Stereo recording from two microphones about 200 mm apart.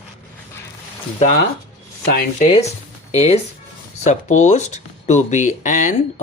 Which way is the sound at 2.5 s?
30° left (ahead or behind).